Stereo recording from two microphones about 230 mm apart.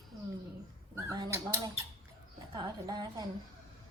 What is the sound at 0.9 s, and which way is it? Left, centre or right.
A woman's voice, centre.